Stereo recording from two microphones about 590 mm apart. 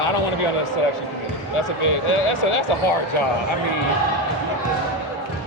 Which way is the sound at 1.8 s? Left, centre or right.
Left.